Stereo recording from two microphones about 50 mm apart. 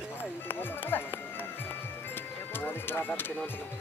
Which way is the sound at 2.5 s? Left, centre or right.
Left.